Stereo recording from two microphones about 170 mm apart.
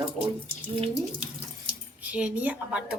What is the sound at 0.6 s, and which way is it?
Speech, 30° right (ahead or behind).